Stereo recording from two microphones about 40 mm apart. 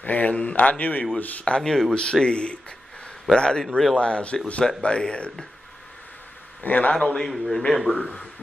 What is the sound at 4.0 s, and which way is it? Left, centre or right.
Speech, left.